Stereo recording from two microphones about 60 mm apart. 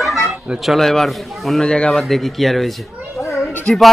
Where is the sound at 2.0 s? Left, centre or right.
Centre.